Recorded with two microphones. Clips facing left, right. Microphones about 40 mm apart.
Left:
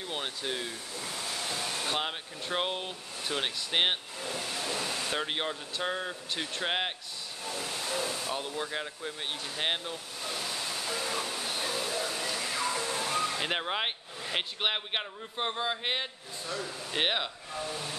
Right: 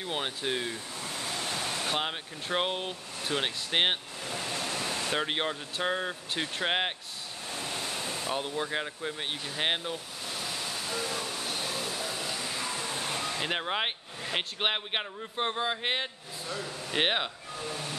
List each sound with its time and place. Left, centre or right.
0.0 s speech: centre
1.0 s waves: right
1.9 s speech: centre
4.3 s waves: right
5.1 s speech: centre
7.5 s a sound: right
8.0 s speech: centre
10.2 s waterfall: centre
12.5 s water: centre
12.9 s waterfall: centre
13.3 s speech: centre